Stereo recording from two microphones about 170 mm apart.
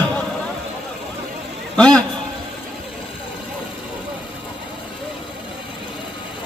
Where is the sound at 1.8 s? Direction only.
5° left (ahead or behind).